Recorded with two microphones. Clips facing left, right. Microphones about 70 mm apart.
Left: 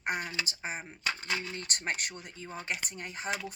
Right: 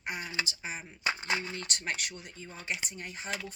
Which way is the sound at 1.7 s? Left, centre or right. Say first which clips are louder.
Left 3 dB; left.